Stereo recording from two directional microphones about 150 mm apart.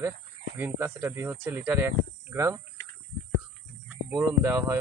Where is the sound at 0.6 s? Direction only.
15° right (ahead or behind).